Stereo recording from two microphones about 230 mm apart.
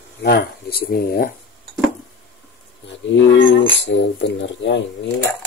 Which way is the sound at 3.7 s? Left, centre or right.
Left.